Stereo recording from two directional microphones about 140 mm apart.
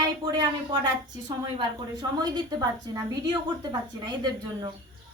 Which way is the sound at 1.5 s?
30° right (ahead or behind).